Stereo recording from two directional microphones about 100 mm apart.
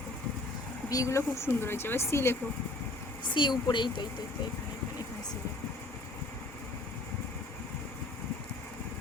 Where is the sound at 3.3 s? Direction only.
50° left (ahead or behind).